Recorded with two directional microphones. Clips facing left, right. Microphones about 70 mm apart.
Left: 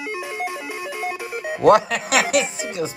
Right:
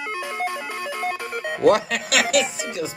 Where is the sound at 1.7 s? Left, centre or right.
Left.